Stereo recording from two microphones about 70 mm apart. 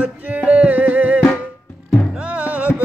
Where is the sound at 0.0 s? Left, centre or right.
Right.